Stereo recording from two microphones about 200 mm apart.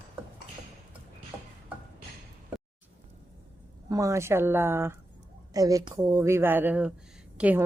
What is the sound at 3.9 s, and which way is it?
A woman's voice, 15° right (ahead or behind).